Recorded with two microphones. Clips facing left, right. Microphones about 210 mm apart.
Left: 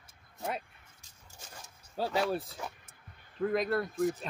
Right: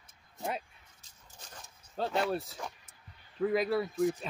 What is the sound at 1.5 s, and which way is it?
Speech, 5° left (ahead or behind).